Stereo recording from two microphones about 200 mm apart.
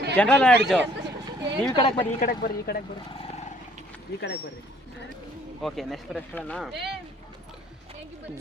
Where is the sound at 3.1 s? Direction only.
30° left (ahead or behind).